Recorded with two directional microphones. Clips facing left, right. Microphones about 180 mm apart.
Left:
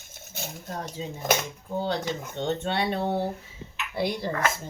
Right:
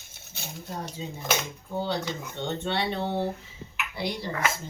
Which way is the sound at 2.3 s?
15° left (ahead or behind).